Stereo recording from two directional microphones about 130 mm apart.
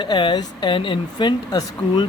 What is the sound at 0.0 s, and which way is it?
Speech, 40° left (ahead or behind).